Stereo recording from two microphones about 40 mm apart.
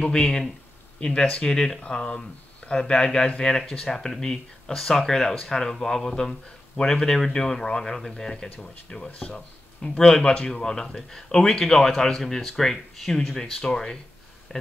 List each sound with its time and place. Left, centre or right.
0.0 s speech: left
1.5 s speech: centre
14.5 s speech: left